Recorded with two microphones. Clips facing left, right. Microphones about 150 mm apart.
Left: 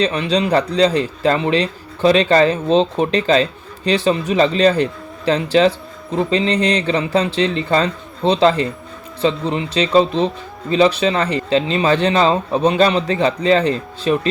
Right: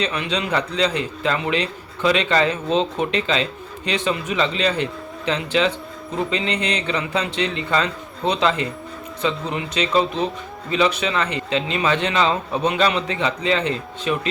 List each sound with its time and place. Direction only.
0.0 s speech: 35° left (ahead or behind)